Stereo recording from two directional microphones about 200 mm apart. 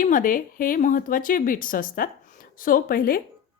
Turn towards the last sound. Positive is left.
turn(degrees=45)  # may be behind; listen again after turning